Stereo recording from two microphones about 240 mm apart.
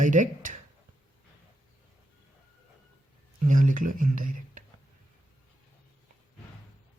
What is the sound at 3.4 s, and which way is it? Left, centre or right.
Speech, right.